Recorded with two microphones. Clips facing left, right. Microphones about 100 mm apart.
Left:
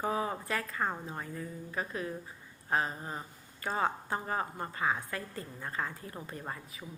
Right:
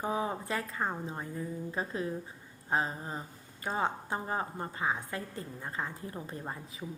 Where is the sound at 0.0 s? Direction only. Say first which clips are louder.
Even; 20° right (ahead or behind).